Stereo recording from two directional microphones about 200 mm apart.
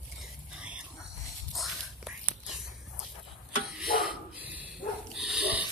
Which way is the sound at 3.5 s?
50° left (ahead or behind).